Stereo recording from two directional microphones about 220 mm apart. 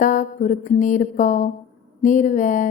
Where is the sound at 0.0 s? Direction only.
35° left (ahead or behind).